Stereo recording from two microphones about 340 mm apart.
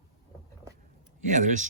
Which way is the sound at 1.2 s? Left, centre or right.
Right.